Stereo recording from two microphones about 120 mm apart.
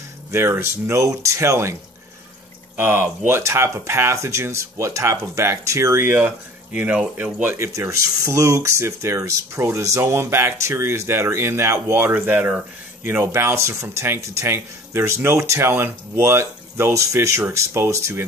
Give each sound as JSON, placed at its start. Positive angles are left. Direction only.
{"t": 0.3, "sound": "speech", "side_deg": -20}
{"t": 2.8, "sound": "speech", "side_deg": -15}
{"t": 7.5, "sound": "speech", "side_deg": -25}